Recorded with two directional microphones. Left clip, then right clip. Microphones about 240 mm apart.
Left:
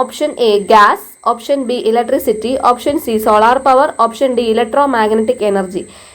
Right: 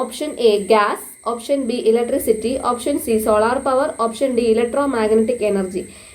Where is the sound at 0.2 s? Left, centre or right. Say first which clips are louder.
Left 2 dB; left.